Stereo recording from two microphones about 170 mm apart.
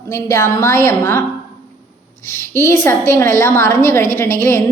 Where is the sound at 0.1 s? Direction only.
15° left (ahead or behind).